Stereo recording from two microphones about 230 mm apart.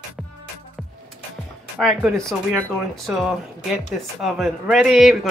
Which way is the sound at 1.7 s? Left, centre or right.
Centre.